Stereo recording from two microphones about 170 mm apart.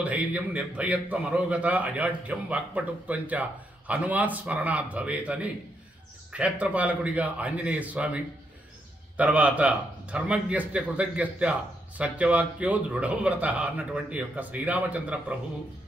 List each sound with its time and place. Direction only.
0.0 s a man's voice: 10° right (ahead or behind)